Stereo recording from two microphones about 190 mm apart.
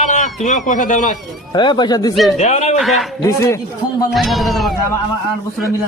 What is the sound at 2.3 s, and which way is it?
Speech, 35° left (ahead or behind).